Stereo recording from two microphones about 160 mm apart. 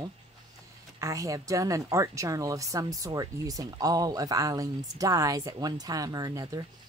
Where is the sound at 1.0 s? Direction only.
20° right (ahead or behind).